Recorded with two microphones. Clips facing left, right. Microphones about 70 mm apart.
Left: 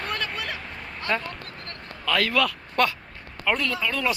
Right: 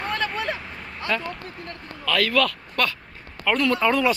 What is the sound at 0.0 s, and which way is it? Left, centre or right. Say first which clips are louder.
Vehicle: right 4 dB; right.